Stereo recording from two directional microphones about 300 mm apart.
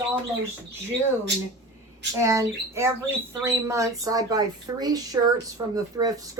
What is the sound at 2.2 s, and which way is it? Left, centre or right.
Speech, centre.